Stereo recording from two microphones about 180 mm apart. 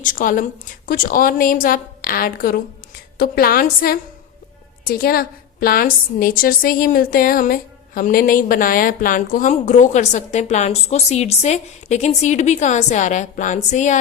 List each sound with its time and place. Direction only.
0.0 s a woman's voice: 45° left (ahead or behind)